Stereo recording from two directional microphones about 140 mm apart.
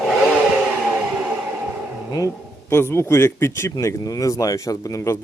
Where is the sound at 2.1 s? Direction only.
25° left (ahead or behind).